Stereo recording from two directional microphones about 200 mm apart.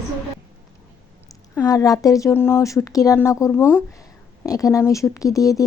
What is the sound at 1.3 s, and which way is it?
Speech, 15° left (ahead or behind).